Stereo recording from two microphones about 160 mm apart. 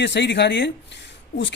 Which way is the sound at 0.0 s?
90° left.